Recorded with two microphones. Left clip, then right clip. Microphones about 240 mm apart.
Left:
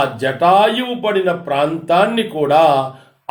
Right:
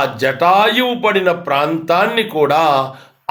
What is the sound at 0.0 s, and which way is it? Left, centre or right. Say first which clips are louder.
Speech: right 1 dB; centre.